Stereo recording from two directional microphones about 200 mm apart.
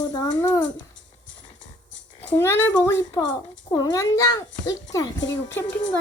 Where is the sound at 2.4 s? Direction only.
15° left (ahead or behind).